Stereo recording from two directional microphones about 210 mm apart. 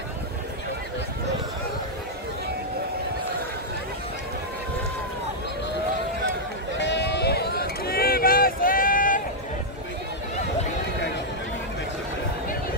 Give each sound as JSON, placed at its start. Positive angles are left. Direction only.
{"t": 6.8, "sound": "sheep", "side_deg": 55}